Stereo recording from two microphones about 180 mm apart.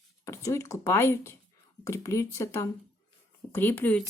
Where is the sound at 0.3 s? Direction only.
15° left (ahead or behind).